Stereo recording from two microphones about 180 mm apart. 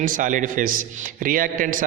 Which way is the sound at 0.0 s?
45° right (ahead or behind).